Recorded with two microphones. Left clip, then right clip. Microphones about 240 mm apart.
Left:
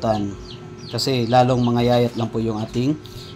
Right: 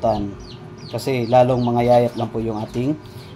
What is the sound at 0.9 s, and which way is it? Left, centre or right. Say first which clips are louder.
Speech: right 1 dB; left.